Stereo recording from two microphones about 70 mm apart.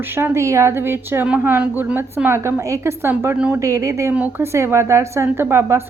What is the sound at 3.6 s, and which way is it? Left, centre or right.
Speech, right.